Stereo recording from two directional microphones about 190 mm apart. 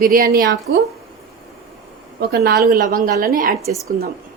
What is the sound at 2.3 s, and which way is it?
Speech, 60° right (ahead or behind).